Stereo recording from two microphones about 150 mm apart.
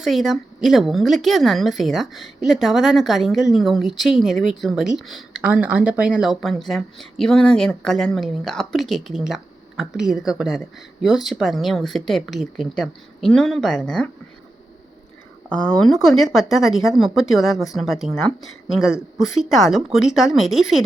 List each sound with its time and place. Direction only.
0.0 s speech: centre (ahead or behind)
15.4 s speech: 5° left (ahead or behind)